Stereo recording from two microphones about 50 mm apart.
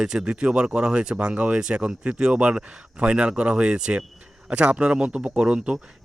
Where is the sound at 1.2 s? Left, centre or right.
Right.